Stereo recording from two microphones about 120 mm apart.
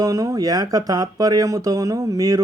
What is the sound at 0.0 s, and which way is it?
A man's voice, 30° right (ahead or behind).